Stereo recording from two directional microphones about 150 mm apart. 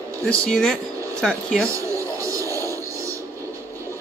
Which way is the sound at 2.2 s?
20° right (ahead or behind).